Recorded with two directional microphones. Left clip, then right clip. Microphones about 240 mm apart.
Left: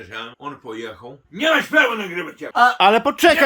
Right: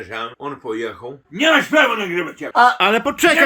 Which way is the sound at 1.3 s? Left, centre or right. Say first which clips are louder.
Right 2 dB; right.